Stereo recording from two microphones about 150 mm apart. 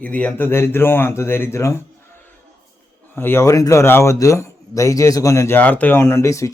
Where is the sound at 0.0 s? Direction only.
10° left (ahead or behind).